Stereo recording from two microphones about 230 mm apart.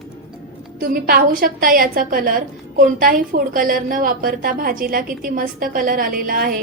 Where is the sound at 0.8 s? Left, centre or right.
Right.